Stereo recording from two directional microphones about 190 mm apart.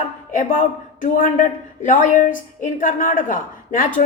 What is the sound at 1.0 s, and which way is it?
A woman's voice, 45° left (ahead or behind).